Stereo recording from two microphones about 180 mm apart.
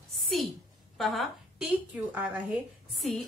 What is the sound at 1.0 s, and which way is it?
A woman's voice, centre (ahead or behind).